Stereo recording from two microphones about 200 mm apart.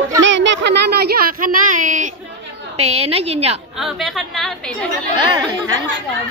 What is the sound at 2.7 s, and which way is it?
Speech, 30° right (ahead or behind).